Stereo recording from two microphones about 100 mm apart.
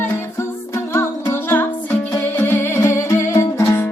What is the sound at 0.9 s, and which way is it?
Music, 25° left (ahead or behind).